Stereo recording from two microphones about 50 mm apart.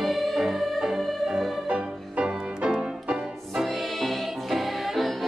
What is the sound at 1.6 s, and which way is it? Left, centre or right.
Music, right.